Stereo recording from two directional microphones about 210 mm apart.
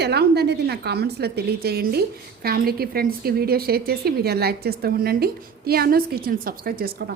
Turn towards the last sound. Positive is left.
turn(degrees=-50)  # may be behind; listen again after turning